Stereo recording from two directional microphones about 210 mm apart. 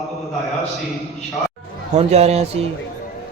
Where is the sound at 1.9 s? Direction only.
30° right (ahead or behind).